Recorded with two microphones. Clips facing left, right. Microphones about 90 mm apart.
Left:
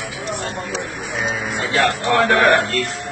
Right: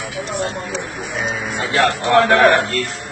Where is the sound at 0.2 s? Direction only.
35° right (ahead or behind).